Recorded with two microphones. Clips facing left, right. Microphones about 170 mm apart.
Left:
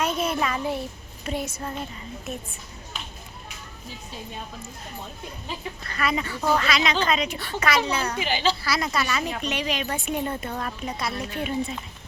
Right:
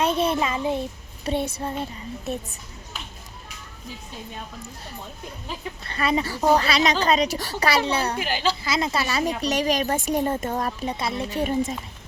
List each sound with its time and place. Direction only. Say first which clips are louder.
0.0 s a child's voice: right 3 dB; 30° right (ahead or behind)
5.8 s speech: right 4 dB; 30° right (ahead or behind)
8.2 s a woman's voice: even; 5° right (ahead or behind)
8.6 s speech: right 1 dB; 25° right (ahead or behind)
9.2 s speech: right 5 dB; 40° right (ahead or behind)
11.3 s a woman's voice: right 6 dB; 40° right (ahead or behind)